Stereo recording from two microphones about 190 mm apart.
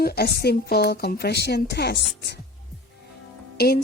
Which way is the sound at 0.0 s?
55° left (ahead or behind).